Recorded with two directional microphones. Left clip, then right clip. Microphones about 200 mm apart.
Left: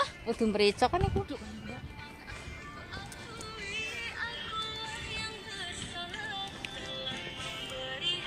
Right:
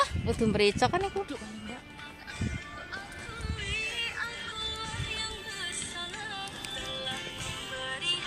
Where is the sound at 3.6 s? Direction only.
25° right (ahead or behind).